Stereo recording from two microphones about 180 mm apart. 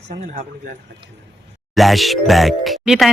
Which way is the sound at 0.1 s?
45° right (ahead or behind).